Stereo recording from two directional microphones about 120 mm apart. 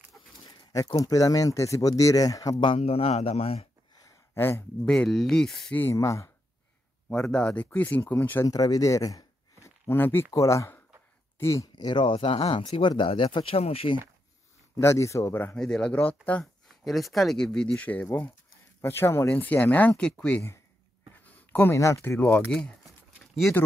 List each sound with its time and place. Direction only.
0.5 s a sound: 40° left (ahead or behind)
0.9 s speech: 30° left (ahead or behind)
2.6 s speech: 50° left (ahead or behind)
4.4 s speech: 20° left (ahead or behind)
4.8 s speech: 5° left (ahead or behind)
5.8 s speech: 20° left (ahead or behind)
7.1 s speech: 5° left (ahead or behind)
8.5 s speech: 30° left (ahead or behind)
11.7 s speech: 40° left (ahead or behind)
12.2 s speech: 50° left (ahead or behind)
14.8 s speech: 25° left (ahead or behind)
16.6 s speech: centre (ahead or behind); by 22.5 s 15° left (ahead or behind)